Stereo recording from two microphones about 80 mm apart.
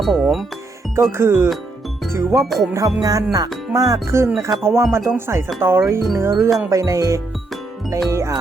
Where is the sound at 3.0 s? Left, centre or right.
Right.